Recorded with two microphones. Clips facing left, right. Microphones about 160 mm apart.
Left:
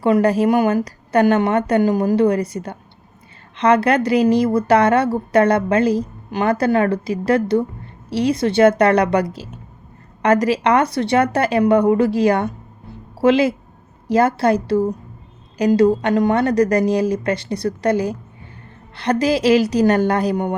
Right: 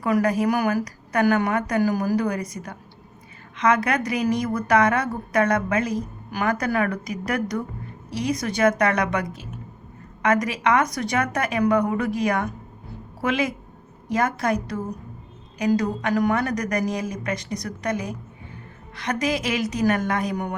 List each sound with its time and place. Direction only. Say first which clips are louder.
0.0 s a woman's voice: left 6 dB; 30° left (ahead or behind)